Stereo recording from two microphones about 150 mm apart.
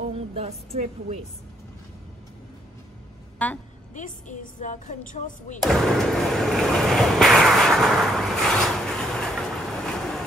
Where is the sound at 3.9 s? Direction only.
55° left (ahead or behind).